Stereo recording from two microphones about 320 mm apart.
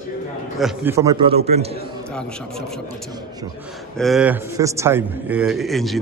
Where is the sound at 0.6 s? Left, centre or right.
Centre.